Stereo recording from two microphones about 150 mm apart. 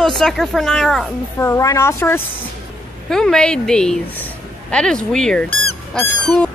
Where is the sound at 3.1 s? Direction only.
5° left (ahead or behind).